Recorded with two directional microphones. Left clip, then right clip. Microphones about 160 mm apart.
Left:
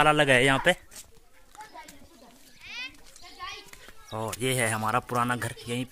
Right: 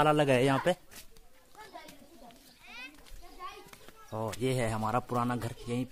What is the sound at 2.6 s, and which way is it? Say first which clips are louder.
Children playing: left 9 dB; 90° right.